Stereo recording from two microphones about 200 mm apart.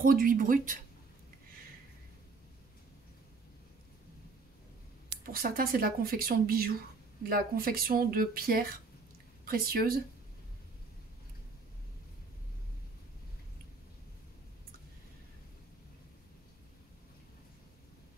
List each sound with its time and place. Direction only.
0.0 s speech: 45° right (ahead or behind)
5.2 s speech: 45° right (ahead or behind)